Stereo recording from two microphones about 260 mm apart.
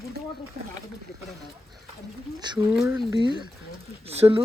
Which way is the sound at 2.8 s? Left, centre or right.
Centre.